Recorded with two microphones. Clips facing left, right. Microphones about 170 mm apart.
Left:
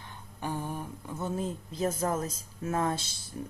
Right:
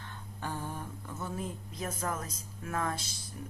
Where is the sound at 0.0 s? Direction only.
15° left (ahead or behind).